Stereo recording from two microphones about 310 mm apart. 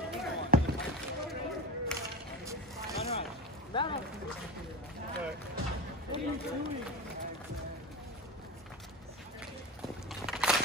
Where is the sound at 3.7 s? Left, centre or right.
Centre.